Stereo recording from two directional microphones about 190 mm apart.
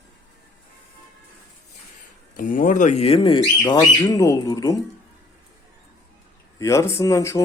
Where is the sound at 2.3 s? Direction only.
45° left (ahead or behind); by 4.7 s 20° left (ahead or behind).